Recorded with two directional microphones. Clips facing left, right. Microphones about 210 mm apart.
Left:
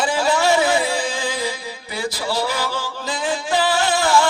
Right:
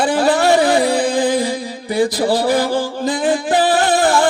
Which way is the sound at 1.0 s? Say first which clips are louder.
Right 9 dB; 55° right (ahead or behind).